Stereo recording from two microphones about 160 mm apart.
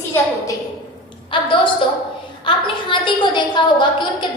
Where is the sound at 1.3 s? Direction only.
30° left (ahead or behind).